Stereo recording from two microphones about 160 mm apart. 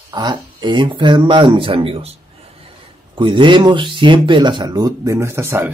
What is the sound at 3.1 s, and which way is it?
Speech, 30° right (ahead or behind).